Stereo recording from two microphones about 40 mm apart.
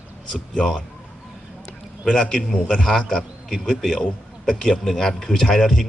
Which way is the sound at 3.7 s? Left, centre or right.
Centre.